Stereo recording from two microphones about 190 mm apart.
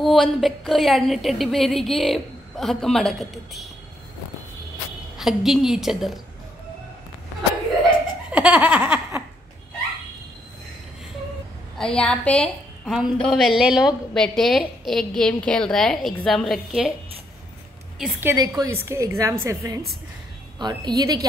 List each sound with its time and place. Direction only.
0.0 s a woman's voice: centre (ahead or behind)
5.1 s a woman's voice: centre (ahead or behind)
8.3 s laughter: 5° right (ahead or behind)
11.8 s a woman's voice: 5° left (ahead or behind)
17.9 s a woman's voice: centre (ahead or behind)
18.6 s a woman's voice: 15° right (ahead or behind)